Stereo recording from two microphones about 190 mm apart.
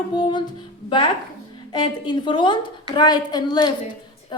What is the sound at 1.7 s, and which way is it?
A woman's voice, 25° left (ahead or behind).